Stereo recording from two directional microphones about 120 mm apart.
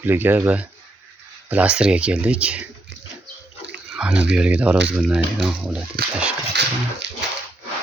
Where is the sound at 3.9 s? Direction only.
5° right (ahead or behind).